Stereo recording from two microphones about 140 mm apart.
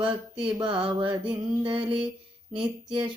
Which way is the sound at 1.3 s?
40° right (ahead or behind).